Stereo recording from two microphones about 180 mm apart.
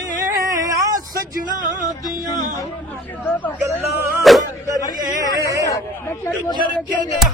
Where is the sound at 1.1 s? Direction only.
50° right (ahead or behind).